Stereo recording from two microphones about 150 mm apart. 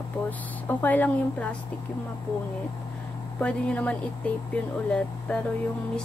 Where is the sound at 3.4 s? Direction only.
10° left (ahead or behind).